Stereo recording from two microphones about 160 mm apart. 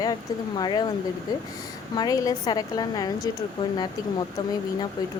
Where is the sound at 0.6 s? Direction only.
25° left (ahead or behind).